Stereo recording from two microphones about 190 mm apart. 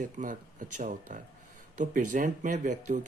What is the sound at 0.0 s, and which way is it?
Speech, 40° right (ahead or behind).